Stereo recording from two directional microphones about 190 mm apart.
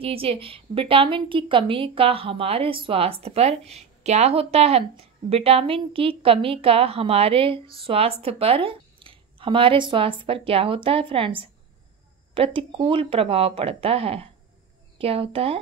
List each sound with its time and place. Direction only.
0.0 s a woman's voice: 30° right (ahead or behind)